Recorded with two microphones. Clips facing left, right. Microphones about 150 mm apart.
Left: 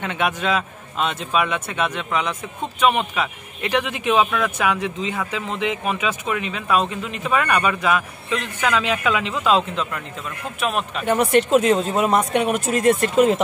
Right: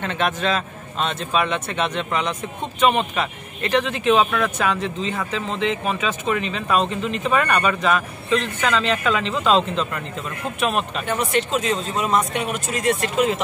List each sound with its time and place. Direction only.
0.0 s speech: 10° left (ahead or behind)
11.1 s speech: 50° left (ahead or behind)